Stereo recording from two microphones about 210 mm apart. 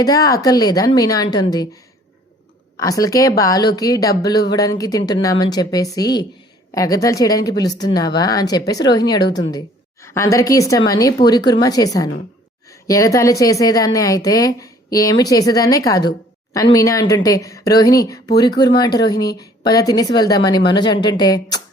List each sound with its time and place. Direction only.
0.0 s speech: 15° left (ahead or behind)
2.7 s speech: 15° left (ahead or behind)